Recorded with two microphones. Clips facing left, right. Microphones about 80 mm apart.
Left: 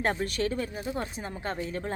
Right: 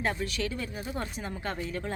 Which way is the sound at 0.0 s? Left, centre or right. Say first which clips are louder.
Left 3 dB; left.